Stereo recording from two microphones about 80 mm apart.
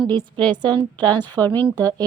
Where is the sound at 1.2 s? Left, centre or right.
Left.